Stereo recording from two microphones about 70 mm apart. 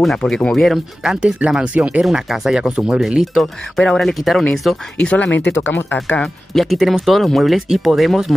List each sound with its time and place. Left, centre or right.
0.2 s speech: centre
1.0 s speech: centre
3.7 s speech: centre
4.9 s speech: centre
6.2 s speech: centre